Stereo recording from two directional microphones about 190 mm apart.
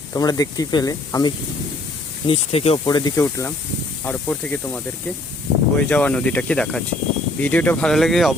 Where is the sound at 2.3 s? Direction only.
30° left (ahead or behind); by 4.8 s 10° left (ahead or behind).